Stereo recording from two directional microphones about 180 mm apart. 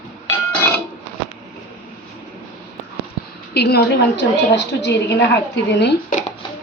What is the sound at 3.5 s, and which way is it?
A woman's voice, 65° left (ahead or behind).